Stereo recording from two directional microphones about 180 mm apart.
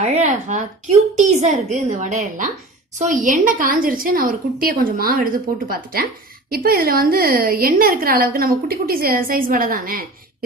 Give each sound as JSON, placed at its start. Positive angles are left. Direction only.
{"t": 0.0, "sound": "a woman's voice", "side_deg": -40}